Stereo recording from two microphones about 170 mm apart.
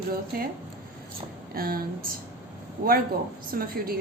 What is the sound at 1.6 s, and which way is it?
Speech, 60° right (ahead or behind).